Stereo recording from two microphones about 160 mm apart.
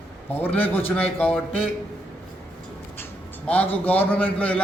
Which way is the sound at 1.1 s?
10° left (ahead or behind).